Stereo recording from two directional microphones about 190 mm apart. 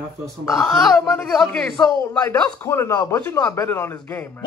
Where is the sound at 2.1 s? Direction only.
15° left (ahead or behind).